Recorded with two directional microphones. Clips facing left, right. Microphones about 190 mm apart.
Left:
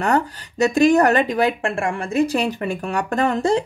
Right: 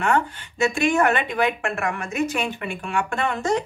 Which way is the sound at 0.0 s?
40° left (ahead or behind).